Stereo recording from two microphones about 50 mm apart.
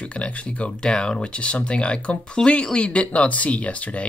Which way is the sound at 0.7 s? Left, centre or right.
Centre.